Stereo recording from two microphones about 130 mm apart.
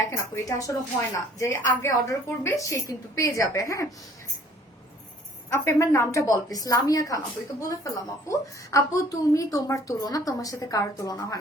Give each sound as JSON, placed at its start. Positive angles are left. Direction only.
{"t": 0.3, "sound": "a woman's voice", "side_deg": 25}
{"t": 5.5, "sound": "a woman's voice", "side_deg": 20}